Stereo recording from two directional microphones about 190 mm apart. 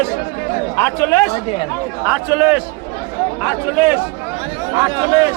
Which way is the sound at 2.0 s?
10° right (ahead or behind).